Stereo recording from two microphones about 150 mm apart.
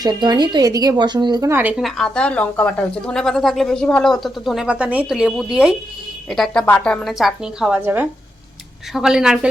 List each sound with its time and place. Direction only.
0.0 s a woman's voice: 30° right (ahead or behind)
1.5 s speech: 15° right (ahead or behind)
1.8 s speech: 5° left (ahead or behind)